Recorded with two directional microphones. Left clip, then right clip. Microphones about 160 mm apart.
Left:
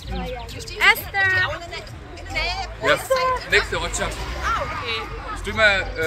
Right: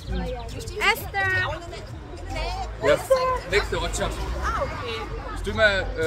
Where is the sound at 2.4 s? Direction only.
45° right (ahead or behind).